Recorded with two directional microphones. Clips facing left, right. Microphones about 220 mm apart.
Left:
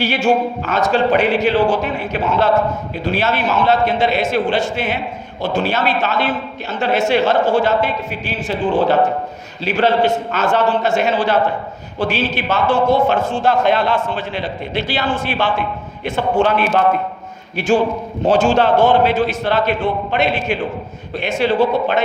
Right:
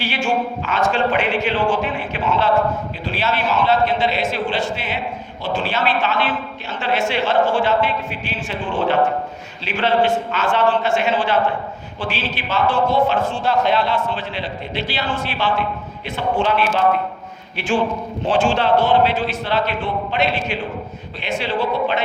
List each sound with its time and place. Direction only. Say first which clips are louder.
0.0 s a man's voice: left 5 dB; 40° left (ahead or behind)
18.3 s a man's voice: left 4 dB; 40° left (ahead or behind)